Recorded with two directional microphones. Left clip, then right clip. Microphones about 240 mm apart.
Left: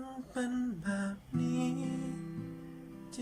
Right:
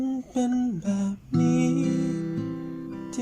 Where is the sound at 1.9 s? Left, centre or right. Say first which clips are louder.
Right 13 dB; right.